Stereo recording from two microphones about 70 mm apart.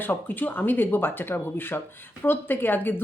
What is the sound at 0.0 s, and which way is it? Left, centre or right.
Speech, left.